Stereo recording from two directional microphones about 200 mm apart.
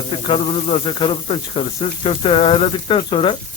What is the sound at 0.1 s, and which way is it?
Speech, 25° left (ahead or behind).